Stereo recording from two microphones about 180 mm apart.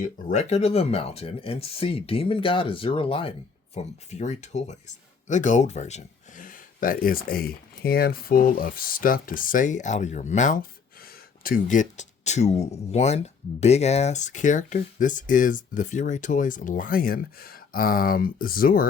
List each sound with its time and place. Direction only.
0.0 s speech: 40° left (ahead or behind)